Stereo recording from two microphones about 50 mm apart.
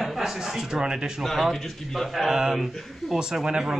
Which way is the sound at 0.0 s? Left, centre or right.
Centre.